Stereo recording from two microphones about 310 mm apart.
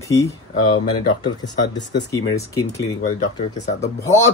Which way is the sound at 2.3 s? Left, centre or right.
Centre.